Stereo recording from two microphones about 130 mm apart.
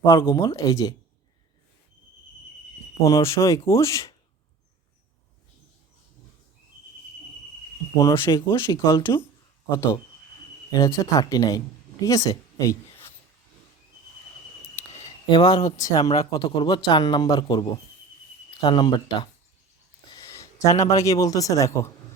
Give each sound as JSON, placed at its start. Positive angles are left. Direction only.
{"t": 0.0, "sound": "speech", "side_deg": 20}
{"t": 3.0, "sound": "speech", "side_deg": 25}
{"t": 7.9, "sound": "speech", "side_deg": 25}
{"t": 8.5, "sound": "speech", "side_deg": 25}
{"t": 15.3, "sound": "speech", "side_deg": 40}
{"t": 15.8, "sound": "speech", "side_deg": 25}
{"t": 20.1, "sound": "speech", "side_deg": 25}